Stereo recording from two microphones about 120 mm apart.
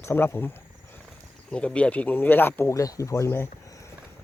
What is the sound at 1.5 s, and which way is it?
Speech, 10° left (ahead or behind).